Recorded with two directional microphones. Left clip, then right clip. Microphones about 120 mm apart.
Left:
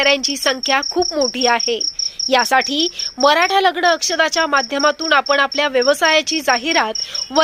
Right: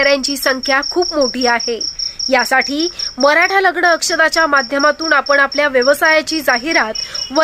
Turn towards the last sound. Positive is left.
turn(degrees=30)  # may be behind; listen again after turning